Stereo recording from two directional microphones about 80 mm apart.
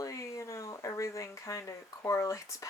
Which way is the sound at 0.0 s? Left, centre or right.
Left.